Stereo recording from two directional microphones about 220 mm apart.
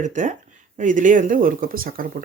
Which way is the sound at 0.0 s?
35° right (ahead or behind).